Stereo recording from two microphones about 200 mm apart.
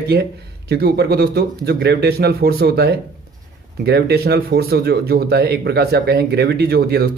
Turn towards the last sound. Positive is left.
turn(degrees=-50)  # may be behind; listen again after turning